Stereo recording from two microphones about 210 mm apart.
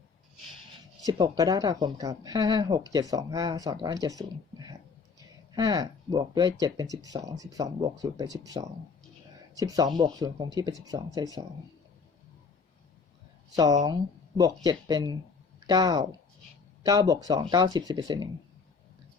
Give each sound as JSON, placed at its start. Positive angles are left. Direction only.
{"t": 1.0, "sound": "speech", "side_deg": -20}
{"t": 13.8, "sound": "speech", "side_deg": -20}